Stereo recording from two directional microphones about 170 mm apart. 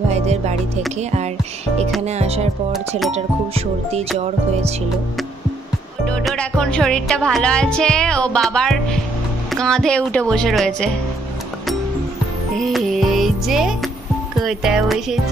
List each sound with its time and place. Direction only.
0.1 s speech: 40° right (ahead or behind)
2.0 s speech: 40° right (ahead or behind)
6.0 s music: 5° left (ahead or behind)
12.5 s music: centre (ahead or behind)